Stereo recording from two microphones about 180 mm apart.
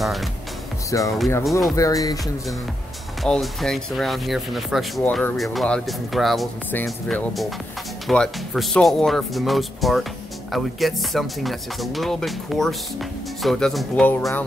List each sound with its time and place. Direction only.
0.0 s speech: centre (ahead or behind)
0.8 s speech: 15° left (ahead or behind)
1.4 s speech: centre (ahead or behind)
1.8 s speech: 20° left (ahead or behind)
3.2 s speech: centre (ahead or behind)